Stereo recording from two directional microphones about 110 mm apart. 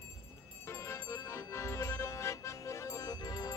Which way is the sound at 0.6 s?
25° left (ahead or behind).